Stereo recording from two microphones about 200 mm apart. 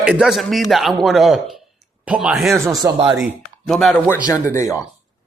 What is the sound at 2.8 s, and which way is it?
Speech, 20° right (ahead or behind).